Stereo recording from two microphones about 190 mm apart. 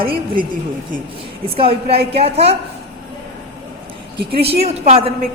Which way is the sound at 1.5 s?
30° right (ahead or behind).